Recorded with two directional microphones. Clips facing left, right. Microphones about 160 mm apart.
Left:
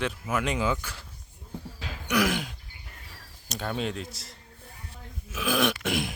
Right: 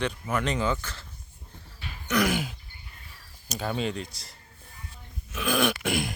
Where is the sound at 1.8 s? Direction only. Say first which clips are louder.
Left 3 dB; 90° left.